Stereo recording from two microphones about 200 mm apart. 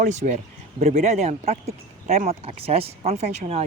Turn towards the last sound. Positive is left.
turn(degrees=-35)  # may be behind; listen again after turning